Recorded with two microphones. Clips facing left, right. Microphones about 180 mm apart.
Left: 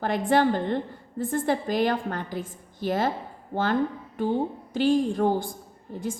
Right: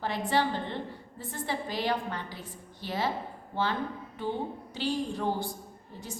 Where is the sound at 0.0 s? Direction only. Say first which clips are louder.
Left 7 dB; 50° left (ahead or behind).